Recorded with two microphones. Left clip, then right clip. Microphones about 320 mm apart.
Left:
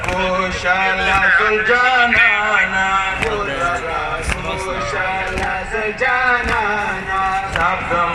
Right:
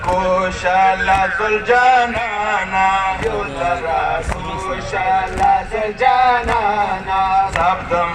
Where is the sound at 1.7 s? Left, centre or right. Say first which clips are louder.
Right 2 dB; centre.